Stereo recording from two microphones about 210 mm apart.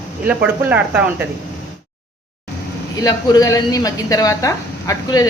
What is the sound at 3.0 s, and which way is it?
A woman's voice, 15° left (ahead or behind).